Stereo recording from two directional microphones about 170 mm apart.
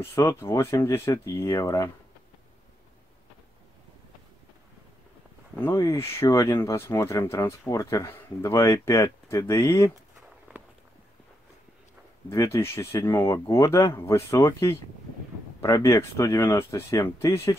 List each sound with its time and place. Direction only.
0.0 s speech: 15° left (ahead or behind)
5.6 s speech: 15° left (ahead or behind)
10.5 s walk: 10° right (ahead or behind)
12.3 s speech: 15° left (ahead or behind)